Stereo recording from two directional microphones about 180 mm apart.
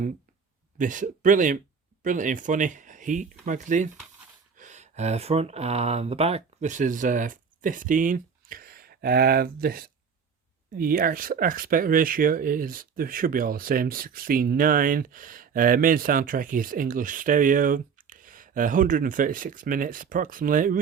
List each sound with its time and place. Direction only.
0.8 s speech: 45° right (ahead or behind)